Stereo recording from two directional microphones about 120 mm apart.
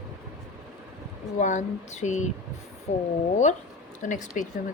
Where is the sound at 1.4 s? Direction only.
90° left.